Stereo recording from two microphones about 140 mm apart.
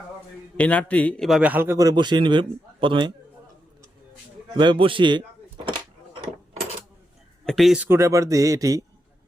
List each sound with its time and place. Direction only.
0.5 s a man's voice: 10° left (ahead or behind)
1.4 s a man's voice: 10° right (ahead or behind); by 3.1 s 35° right (ahead or behind)
4.5 s a man's voice: 35° right (ahead or behind)
5.6 s a sound: 35° right (ahead or behind)
7.4 s speech: centre (ahead or behind)
7.8 s speech: 20° right (ahead or behind)